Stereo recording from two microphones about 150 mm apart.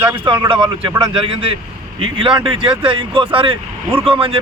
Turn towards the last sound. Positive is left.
turn(degrees=-35)  # may be behind; listen again after turning